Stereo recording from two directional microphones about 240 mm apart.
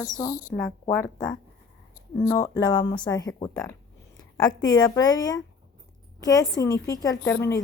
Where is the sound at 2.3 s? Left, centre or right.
Centre.